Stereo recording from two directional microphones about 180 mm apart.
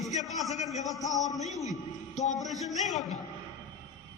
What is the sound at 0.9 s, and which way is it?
Speech, 20° left (ahead or behind).